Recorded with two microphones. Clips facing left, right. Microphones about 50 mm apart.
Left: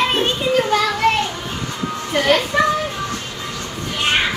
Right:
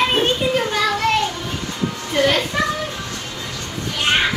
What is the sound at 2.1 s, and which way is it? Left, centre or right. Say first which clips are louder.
Speech: left 1 dB; centre.